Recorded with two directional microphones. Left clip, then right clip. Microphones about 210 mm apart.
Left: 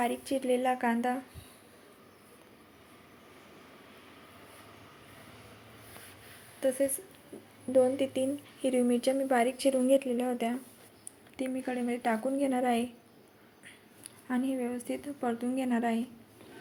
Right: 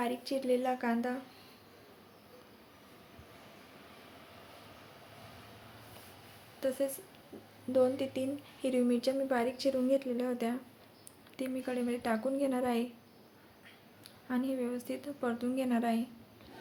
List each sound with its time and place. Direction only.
0.0 s a woman's voice: 10° left (ahead or behind)
6.6 s a woman's voice: 10° left (ahead or behind)
14.3 s a woman's voice: 10° left (ahead or behind)